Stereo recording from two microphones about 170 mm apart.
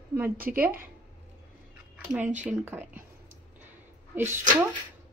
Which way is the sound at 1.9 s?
10° right (ahead or behind).